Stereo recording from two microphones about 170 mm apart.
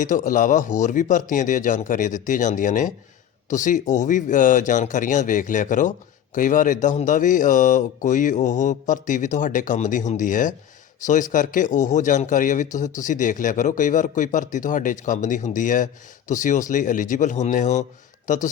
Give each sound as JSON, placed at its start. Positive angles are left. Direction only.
{"t": 0.0, "sound": "speech", "side_deg": 50}